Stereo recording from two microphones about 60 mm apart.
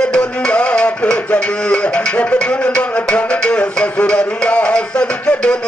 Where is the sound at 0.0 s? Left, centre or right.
Centre.